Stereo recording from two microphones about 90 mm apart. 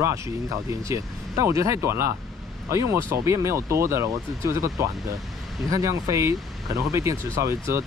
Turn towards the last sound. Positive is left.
turn(degrees=-35)  # may be behind; listen again after turning